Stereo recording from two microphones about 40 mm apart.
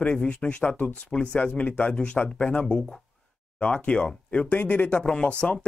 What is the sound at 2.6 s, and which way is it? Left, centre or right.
Speech, left.